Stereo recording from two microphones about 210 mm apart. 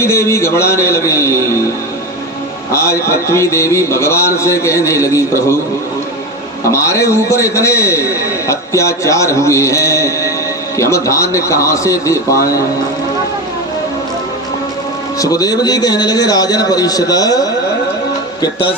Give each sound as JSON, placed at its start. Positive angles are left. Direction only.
{"t": 0.0, "sound": "a man's voice", "side_deg": 15}
{"t": 2.7, "sound": "a man's voice", "side_deg": 15}
{"t": 6.7, "sound": "a man's voice", "side_deg": 15}
{"t": 15.2, "sound": "a man's voice", "side_deg": 15}